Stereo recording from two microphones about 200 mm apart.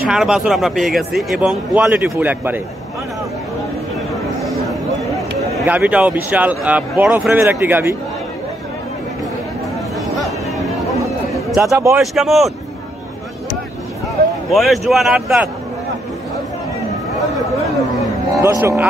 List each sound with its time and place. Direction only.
0.0 s speech: 5° right (ahead or behind)
4.4 s a sound: centre (ahead or behind)
5.6 s speech: 5° right (ahead or behind)
9.9 s chatter: centre (ahead or behind)
11.6 s speech: 15° right (ahead or behind)
12.0 s speech: centre (ahead or behind)
14.5 s speech: centre (ahead or behind)
18.4 s speech: 15° right (ahead or behind)